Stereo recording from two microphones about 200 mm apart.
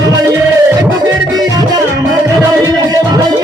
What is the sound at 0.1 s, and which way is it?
Music, 20° right (ahead or behind).